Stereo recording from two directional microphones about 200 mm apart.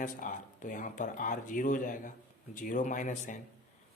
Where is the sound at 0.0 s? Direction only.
40° left (ahead or behind).